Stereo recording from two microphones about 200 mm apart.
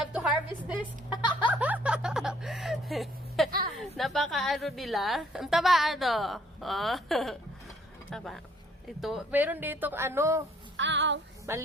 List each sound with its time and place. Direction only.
0.0 s music: 5° right (ahead or behind)
1.1 s music: 25° left (ahead or behind)
1.5 s a sound: 5° right (ahead or behind)
3.8 s a woman's voice: centre (ahead or behind)
10.8 s speech: 65° right (ahead or behind)
11.5 s speech: 15° right (ahead or behind)